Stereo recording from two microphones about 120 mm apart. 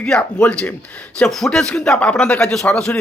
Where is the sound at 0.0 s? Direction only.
5° left (ahead or behind).